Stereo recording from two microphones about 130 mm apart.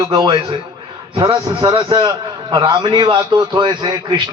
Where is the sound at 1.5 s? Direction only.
35° right (ahead or behind).